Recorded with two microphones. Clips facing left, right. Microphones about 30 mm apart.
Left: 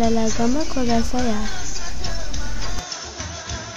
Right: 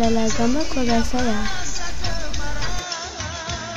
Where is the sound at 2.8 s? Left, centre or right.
Right.